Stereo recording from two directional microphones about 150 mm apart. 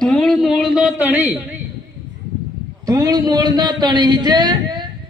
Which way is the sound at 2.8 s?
25° right (ahead or behind).